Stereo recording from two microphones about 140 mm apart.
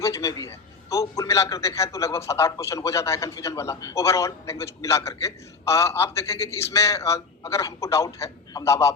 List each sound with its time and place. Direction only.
0.0 s a man's voice: 25° left (ahead or behind)